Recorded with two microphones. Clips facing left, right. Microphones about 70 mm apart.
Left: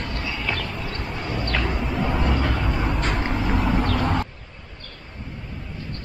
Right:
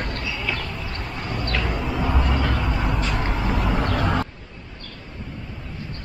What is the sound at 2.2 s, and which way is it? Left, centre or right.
Vehicle, centre.